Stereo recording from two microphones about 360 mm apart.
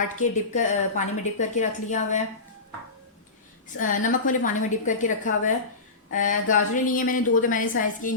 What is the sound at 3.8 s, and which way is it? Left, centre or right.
A woman's voice, left.